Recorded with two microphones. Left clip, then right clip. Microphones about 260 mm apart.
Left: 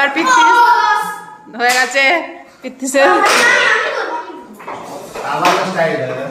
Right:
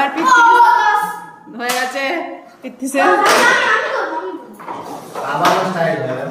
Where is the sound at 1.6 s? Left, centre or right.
Centre.